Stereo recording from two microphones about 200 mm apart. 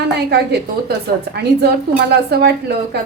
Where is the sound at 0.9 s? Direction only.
55° right (ahead or behind).